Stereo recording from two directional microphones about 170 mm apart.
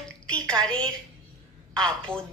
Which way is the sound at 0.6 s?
5° left (ahead or behind).